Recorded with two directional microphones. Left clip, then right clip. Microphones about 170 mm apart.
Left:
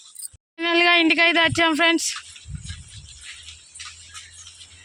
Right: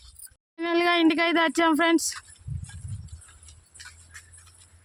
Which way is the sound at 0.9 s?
15° right (ahead or behind).